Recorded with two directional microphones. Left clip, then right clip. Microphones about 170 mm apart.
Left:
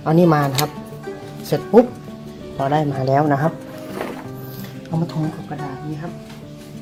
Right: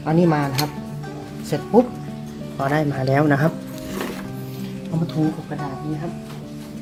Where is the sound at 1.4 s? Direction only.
30° left (ahead or behind).